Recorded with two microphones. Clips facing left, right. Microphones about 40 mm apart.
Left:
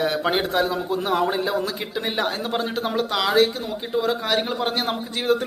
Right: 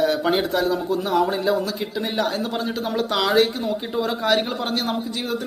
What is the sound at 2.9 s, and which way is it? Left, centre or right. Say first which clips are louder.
Speech: even; centre.